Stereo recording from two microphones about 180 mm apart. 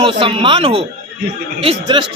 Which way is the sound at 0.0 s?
30° right (ahead or behind).